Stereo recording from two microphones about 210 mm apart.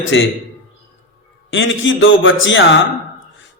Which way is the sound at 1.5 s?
65° left (ahead or behind).